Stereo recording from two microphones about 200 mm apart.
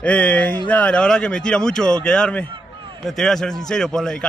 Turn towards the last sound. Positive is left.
turn(degrees=5)  # may be behind; listen again after turning